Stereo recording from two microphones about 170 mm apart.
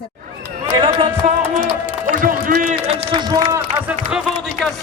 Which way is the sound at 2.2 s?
50° right (ahead or behind).